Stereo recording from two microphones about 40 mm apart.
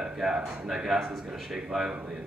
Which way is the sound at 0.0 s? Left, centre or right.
Centre.